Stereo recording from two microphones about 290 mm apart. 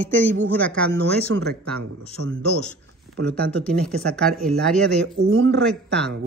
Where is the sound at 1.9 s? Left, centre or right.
Right.